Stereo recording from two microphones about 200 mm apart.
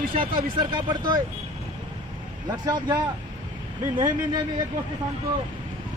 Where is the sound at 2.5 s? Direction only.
20° right (ahead or behind).